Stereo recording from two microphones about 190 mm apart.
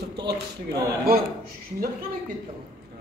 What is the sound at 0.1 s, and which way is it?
Speech, 60° right (ahead or behind).